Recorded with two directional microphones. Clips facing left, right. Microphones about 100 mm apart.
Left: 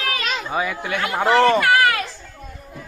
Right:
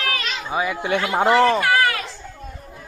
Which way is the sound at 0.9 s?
25° right (ahead or behind).